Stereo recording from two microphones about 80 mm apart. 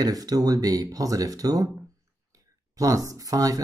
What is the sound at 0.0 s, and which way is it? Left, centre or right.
Speech, right.